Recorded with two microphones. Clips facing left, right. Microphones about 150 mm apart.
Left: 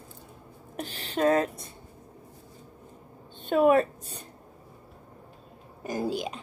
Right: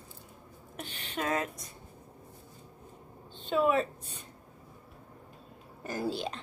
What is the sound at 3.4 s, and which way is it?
Speech, 55° left (ahead or behind).